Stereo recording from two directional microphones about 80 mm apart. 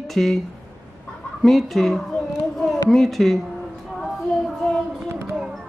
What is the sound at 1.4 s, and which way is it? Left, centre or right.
Speech, centre.